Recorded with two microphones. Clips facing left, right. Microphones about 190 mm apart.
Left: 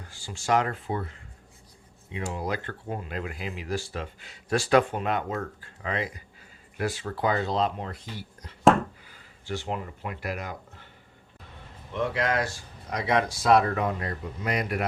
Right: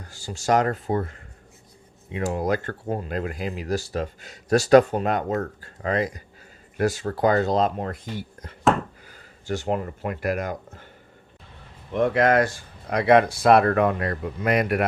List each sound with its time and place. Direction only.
0.0 s speech: 40° right (ahead or behind)
11.9 s speech: 50° right (ahead or behind)